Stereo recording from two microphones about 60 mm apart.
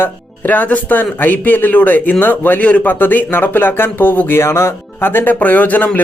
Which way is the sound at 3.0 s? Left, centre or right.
Left.